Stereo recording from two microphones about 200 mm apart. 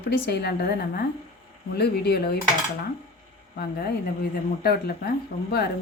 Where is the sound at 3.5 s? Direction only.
50° left (ahead or behind).